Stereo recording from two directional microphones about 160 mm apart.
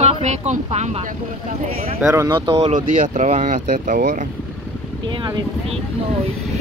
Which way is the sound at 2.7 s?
50° right (ahead or behind).